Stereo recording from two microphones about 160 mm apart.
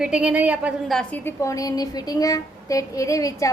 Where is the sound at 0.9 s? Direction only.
10° left (ahead or behind).